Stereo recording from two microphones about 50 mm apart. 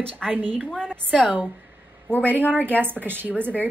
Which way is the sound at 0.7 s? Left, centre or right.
Centre.